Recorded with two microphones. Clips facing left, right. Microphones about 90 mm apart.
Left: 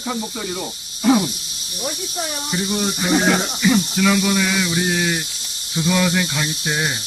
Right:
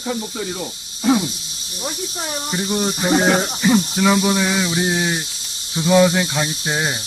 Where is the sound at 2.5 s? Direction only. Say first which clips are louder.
Right 2 dB; 20° right (ahead or behind).